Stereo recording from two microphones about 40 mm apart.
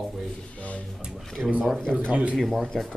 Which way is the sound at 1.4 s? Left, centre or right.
Centre.